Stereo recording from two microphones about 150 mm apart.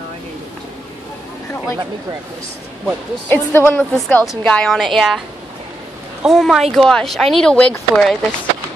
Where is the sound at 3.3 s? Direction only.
15° left (ahead or behind).